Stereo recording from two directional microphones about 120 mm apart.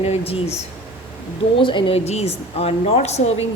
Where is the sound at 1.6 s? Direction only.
45° left (ahead or behind).